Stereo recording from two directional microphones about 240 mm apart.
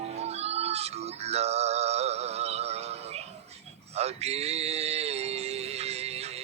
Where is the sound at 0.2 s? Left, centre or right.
Right.